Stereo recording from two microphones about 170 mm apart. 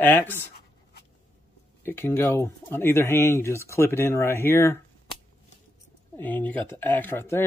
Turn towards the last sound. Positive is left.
turn(degrees=15)  # may be behind; listen again after turning